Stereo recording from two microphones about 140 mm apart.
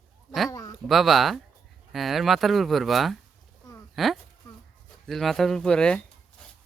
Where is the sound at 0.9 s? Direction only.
Centre (ahead or behind).